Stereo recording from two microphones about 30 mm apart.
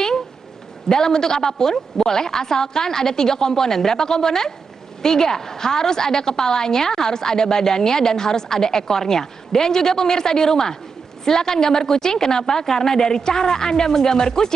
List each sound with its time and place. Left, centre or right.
0.8 s a woman's voice: centre